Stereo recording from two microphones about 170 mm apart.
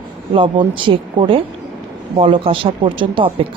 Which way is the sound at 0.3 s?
30° right (ahead or behind).